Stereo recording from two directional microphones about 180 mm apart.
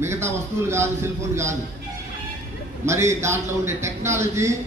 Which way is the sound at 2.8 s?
15° right (ahead or behind).